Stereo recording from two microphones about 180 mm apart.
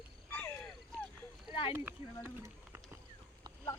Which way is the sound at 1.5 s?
30° left (ahead or behind).